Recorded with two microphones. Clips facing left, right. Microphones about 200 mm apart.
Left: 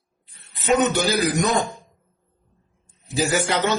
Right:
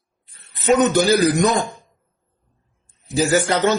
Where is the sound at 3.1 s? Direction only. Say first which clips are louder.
Right 4 dB; 45° right (ahead or behind).